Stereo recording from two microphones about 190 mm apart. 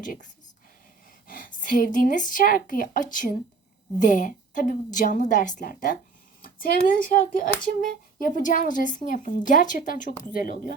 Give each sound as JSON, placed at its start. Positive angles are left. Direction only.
{"t": 0.0, "sound": "speech", "side_deg": 45}
{"t": 1.3, "sound": "speech", "side_deg": 45}